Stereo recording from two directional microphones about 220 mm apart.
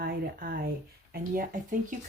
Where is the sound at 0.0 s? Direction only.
45° right (ahead or behind).